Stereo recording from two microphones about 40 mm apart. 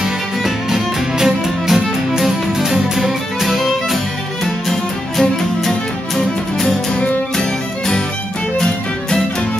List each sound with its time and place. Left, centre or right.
0.0 s music: centre
5.7 s music: centre